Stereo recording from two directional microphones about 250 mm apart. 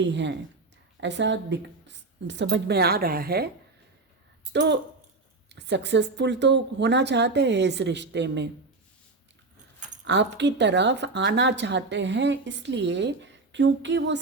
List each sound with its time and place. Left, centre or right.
0.0 s a woman's voice: right
4.5 s speech: right
10.0 s speech: right